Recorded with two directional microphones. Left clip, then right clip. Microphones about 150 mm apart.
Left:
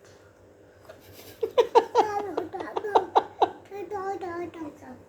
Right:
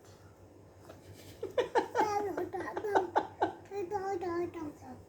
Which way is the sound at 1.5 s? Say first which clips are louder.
Left 11 dB; 65° left (ahead or behind).